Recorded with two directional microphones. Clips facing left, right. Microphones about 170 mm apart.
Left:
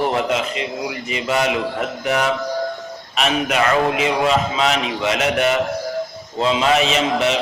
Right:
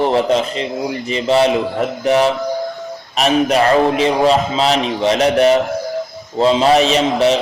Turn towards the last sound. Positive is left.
turn(degrees=-35)  # may be behind; listen again after turning